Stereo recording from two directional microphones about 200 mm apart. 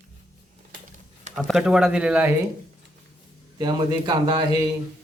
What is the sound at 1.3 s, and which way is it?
Speech, centre (ahead or behind).